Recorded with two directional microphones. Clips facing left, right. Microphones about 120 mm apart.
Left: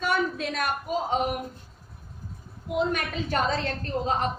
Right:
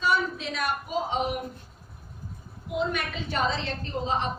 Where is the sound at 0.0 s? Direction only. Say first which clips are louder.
Even; 55° left (ahead or behind).